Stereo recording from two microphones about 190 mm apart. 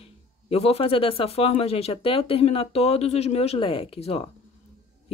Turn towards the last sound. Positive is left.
turn(degrees=30)  # may be behind; listen again after turning